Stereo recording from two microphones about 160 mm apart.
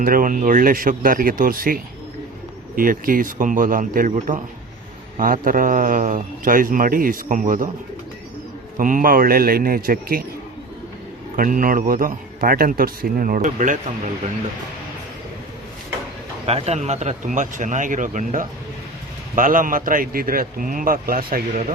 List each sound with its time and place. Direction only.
0.0 s a man's voice: 60° right (ahead or behind)
8.8 s a man's voice: 60° right (ahead or behind)
11.3 s a man's voice: 60° right (ahead or behind)
16.5 s a man's voice: 40° right (ahead or behind); by 21.4 s 65° right (ahead or behind)